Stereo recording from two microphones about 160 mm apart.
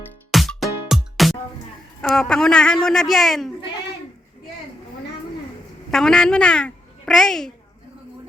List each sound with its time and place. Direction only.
0.3 s music: centre (ahead or behind)
2.0 s a man's voice: 5° left (ahead or behind)
5.9 s a child's voice: 5° left (ahead or behind)